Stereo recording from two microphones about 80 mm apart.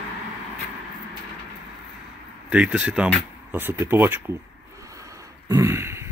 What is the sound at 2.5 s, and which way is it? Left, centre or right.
Speech, centre.